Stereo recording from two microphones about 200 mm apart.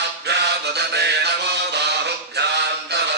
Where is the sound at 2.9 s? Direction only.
55° right (ahead or behind).